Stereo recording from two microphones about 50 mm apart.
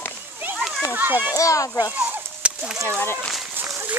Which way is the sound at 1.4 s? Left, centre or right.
Left.